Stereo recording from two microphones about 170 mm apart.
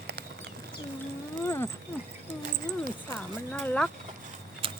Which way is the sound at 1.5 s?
15° left (ahead or behind).